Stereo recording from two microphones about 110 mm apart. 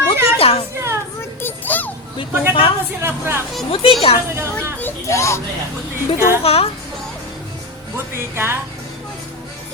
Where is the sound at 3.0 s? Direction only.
20° right (ahead or behind).